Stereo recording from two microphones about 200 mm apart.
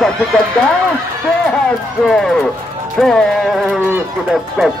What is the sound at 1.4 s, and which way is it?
Speech, 5° left (ahead or behind).